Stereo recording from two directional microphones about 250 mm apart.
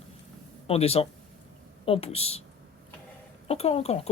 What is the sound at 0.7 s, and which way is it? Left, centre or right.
Speech, left.